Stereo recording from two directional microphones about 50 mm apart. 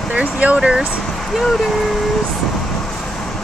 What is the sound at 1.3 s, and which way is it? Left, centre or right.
Speech, centre.